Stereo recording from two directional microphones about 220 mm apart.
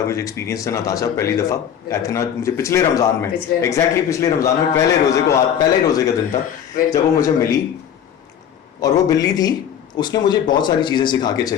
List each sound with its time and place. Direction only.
0.1 s a man's voice: 15° left (ahead or behind)
8.8 s a man's voice: 15° left (ahead or behind)